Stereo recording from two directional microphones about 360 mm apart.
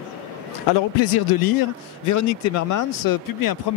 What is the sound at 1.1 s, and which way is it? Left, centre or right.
Speech, left.